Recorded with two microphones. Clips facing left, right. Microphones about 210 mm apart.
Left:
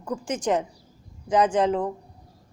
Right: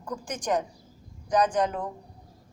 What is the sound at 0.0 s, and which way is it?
A woman's voice, 25° left (ahead or behind).